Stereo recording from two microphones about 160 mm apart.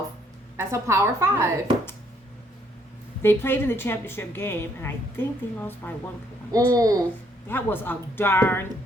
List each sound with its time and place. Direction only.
0.5 s a woman's voice: 15° right (ahead or behind)
3.2 s a woman's voice: 15° left (ahead or behind)
6.5 s speech: 20° right (ahead or behind)
7.4 s a woman's voice: 10° left (ahead or behind)